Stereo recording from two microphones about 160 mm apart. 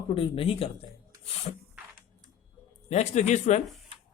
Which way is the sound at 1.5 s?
45° left (ahead or behind).